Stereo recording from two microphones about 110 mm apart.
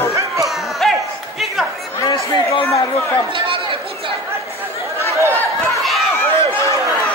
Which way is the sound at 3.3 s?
50° right (ahead or behind).